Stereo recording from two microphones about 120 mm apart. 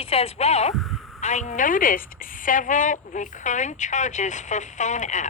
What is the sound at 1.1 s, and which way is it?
A woman's voice, 80° left.